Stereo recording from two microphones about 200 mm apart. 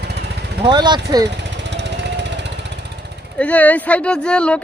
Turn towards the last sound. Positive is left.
turn(degrees=5)  # may be behind; listen again after turning